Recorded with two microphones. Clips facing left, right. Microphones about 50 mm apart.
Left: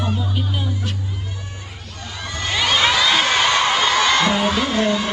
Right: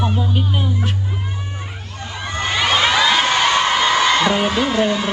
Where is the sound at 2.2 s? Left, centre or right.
Right.